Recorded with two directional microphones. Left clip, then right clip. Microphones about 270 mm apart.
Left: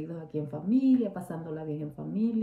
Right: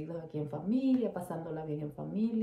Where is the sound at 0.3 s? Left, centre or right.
Centre.